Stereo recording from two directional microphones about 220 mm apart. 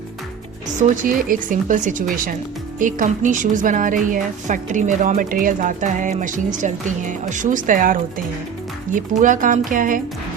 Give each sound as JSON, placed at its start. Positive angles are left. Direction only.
{"t": 0.8, "sound": "a woman's voice", "side_deg": -40}